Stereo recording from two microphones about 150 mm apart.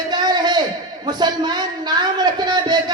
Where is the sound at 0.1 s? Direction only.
30° right (ahead or behind).